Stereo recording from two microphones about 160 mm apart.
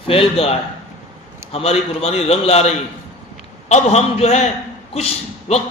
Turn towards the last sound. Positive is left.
turn(degrees=40)  # may be behind; listen again after turning